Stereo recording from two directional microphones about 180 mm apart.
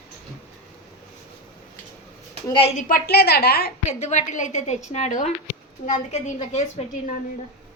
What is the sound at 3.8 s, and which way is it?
A woman's voice, 40° left (ahead or behind).